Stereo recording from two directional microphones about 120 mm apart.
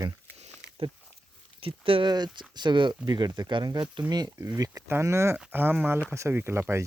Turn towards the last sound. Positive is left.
turn(degrees=-20)  # may be behind; listen again after turning